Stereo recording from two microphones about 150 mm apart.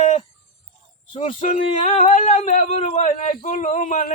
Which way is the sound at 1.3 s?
55° left (ahead or behind).